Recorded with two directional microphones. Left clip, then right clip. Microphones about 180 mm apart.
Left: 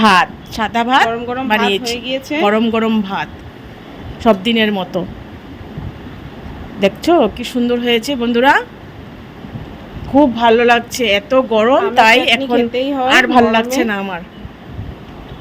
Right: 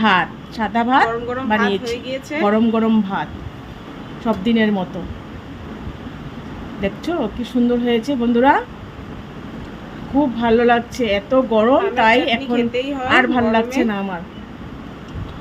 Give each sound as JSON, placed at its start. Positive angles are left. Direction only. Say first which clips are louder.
{"t": 0.0, "sound": "speech", "louder": "left 5 dB", "side_deg": 50}
{"t": 1.9, "sound": "a woman's voice", "louder": "left 5 dB", "side_deg": 25}
{"t": 2.4, "sound": "speech", "louder": "left 3 dB", "side_deg": 45}
{"t": 6.8, "sound": "speech", "louder": "left 10 dB", "side_deg": 50}
{"t": 10.2, "sound": "speech", "louder": "left 6 dB", "side_deg": 45}
{"t": 12.7, "sound": "a woman's voice", "louder": "left 5 dB", "side_deg": 25}
{"t": 13.1, "sound": "speech", "louder": "left 5 dB", "side_deg": 50}